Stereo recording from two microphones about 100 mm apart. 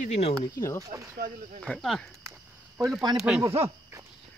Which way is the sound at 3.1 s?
5° right (ahead or behind).